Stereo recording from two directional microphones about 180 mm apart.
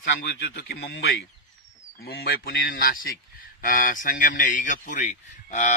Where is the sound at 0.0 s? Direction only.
85° left.